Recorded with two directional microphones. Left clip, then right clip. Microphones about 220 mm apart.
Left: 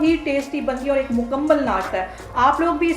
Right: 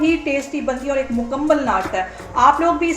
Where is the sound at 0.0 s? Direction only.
5° right (ahead or behind).